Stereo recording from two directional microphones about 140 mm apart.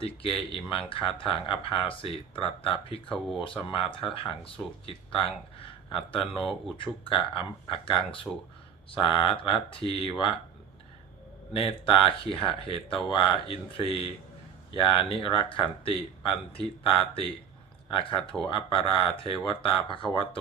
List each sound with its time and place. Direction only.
0.0 s speech: 40° left (ahead or behind)
11.5 s speech: 40° left (ahead or behind)
18.4 s speech: 40° left (ahead or behind)